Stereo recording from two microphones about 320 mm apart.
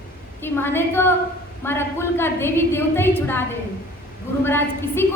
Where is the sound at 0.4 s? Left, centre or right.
Centre.